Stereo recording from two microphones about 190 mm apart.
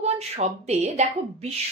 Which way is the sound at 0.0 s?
35° right (ahead or behind).